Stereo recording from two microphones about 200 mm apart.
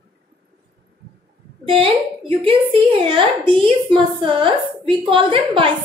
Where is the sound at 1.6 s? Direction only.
25° right (ahead or behind).